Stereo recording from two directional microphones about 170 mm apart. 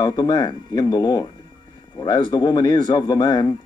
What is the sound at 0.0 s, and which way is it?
A man's voice, 25° left (ahead or behind).